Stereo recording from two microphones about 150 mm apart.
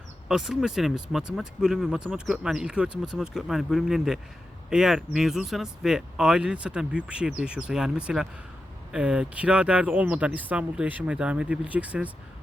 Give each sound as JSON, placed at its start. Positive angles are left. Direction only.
{"t": 0.3, "sound": "speech", "side_deg": -5}